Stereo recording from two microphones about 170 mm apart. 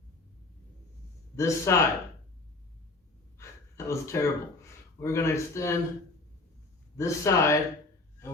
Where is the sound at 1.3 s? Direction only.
20° left (ahead or behind).